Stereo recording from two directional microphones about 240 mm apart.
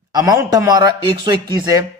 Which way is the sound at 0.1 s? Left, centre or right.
Centre.